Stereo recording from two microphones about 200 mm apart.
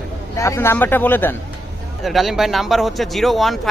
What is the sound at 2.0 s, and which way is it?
Speech, centre (ahead or behind).